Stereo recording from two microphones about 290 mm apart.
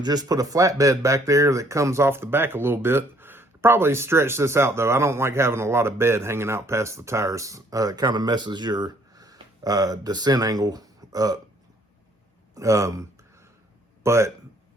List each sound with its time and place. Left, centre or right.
0.0 s speech: centre
12.5 s speech: centre